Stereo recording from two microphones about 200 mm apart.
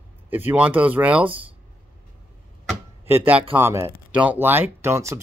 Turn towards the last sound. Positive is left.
turn(degrees=-15)  # may be behind; listen again after turning